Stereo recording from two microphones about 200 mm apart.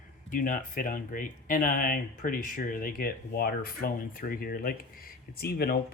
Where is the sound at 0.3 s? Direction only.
40° left (ahead or behind).